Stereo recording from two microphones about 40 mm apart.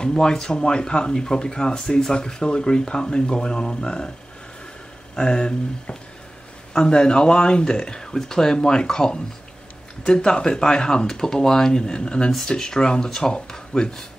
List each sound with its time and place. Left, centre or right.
0.0 s speech: centre
5.1 s speech: centre